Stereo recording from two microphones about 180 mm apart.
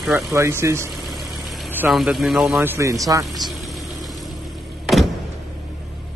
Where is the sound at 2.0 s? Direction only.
Centre (ahead or behind); by 3.3 s 20° right (ahead or behind).